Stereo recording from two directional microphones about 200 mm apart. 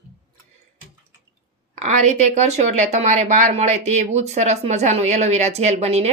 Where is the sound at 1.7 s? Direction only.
35° right (ahead or behind).